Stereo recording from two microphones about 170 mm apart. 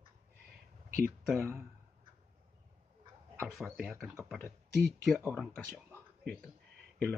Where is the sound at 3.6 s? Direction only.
5° right (ahead or behind).